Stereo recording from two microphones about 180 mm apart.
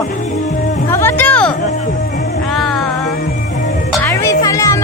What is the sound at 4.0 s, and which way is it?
Music, 15° left (ahead or behind).